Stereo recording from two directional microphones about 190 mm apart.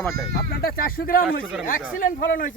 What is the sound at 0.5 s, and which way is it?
Speech, 50° left (ahead or behind).